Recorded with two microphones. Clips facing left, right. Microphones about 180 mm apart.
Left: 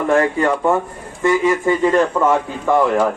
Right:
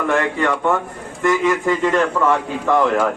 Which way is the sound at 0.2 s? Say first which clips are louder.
Left 3 dB; 30° left (ahead or behind).